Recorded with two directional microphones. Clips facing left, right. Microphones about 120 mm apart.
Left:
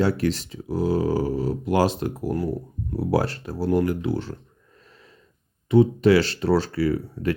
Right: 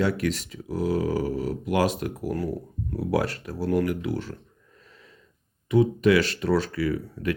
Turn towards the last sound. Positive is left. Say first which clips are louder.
# left 3 dB
turn(degrees=30)  # may be behind; listen again after turning